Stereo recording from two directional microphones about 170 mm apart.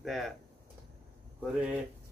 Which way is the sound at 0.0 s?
Centre (ahead or behind).